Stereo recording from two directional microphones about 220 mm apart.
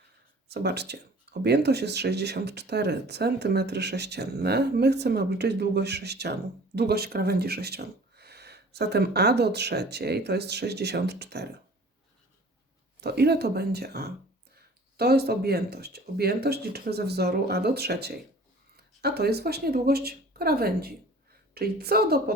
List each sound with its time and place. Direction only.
0.4 s speech: 50° right (ahead or behind)
13.0 s speech: 45° right (ahead or behind)